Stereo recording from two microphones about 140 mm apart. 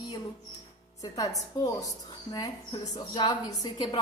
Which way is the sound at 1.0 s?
25° left (ahead or behind).